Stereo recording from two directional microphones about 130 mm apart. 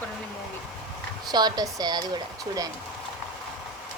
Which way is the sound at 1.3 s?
30° right (ahead or behind).